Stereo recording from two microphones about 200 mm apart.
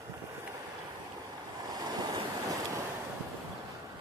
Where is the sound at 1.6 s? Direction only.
20° right (ahead or behind).